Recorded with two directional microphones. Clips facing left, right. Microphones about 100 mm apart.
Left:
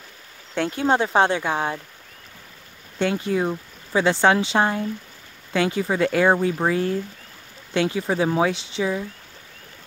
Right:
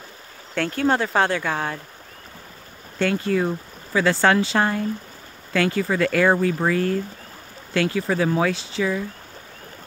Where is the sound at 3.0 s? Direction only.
20° left (ahead or behind).